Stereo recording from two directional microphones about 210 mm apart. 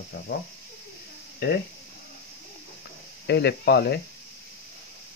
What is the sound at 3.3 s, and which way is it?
Speech, 50° left (ahead or behind).